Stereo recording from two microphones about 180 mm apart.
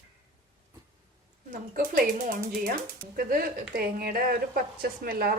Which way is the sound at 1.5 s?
50° right (ahead or behind).